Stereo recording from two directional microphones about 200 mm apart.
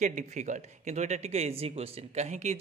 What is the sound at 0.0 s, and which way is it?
A man's voice, 35° right (ahead or behind).